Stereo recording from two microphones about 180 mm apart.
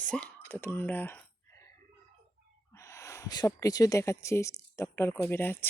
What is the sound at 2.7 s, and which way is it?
Speech, 15° left (ahead or behind).